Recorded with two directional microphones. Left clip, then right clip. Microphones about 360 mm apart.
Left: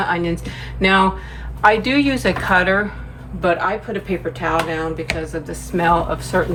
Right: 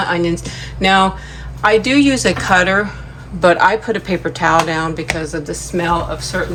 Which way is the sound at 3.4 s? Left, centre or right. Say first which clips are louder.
Right 7 dB; centre.